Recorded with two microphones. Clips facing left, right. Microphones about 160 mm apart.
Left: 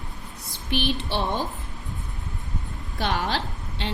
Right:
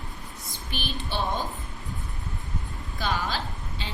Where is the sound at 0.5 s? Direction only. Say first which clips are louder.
Left 9 dB; 70° left (ahead or behind).